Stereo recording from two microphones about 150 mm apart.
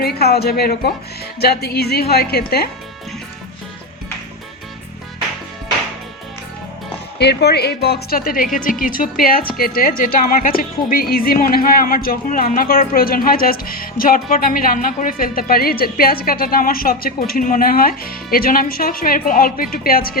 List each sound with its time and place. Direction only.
0.0 s speech: 90° left
7.2 s a woman's voice: 90° left